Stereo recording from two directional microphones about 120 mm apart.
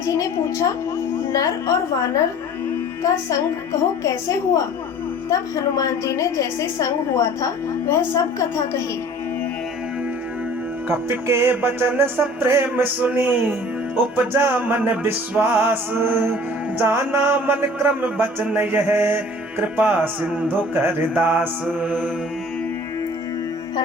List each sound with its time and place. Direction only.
0.0 s a woman's voice: 25° left (ahead or behind)
10.8 s music: 20° right (ahead or behind)
14.4 s music: 15° right (ahead or behind)